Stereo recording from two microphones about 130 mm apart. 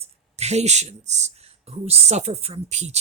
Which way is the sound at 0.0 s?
55° right (ahead or behind).